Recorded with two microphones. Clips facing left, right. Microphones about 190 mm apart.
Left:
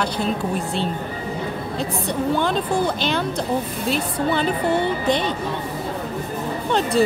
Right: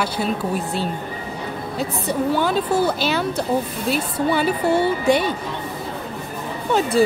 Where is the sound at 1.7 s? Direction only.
5° right (ahead or behind).